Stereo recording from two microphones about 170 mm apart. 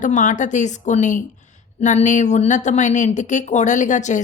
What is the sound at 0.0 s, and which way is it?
A woman's voice, 50° left (ahead or behind).